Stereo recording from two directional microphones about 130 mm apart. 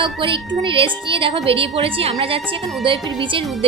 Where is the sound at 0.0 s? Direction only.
40° right (ahead or behind).